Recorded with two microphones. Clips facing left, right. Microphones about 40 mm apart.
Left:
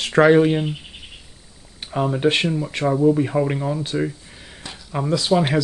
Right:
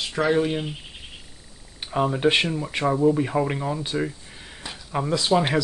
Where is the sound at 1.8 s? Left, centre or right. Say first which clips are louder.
Left 2 dB; centre.